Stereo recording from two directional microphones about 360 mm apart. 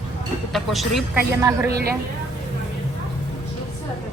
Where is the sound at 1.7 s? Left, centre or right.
Right.